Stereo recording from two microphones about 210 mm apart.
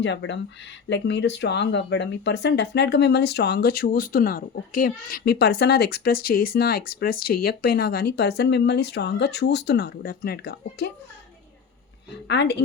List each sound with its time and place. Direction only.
0.0 s speech: 60° left (ahead or behind)
12.3 s speech: 55° left (ahead or behind)